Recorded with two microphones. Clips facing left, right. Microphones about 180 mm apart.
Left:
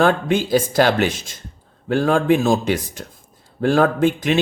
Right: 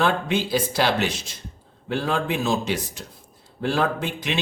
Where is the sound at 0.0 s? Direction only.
50° left (ahead or behind).